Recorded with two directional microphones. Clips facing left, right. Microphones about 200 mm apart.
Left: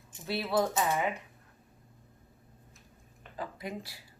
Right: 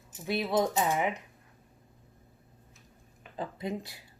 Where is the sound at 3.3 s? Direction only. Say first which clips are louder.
Right 4 dB; 20° right (ahead or behind).